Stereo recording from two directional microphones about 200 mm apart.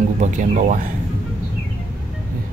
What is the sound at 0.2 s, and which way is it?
Speech, 40° right (ahead or behind).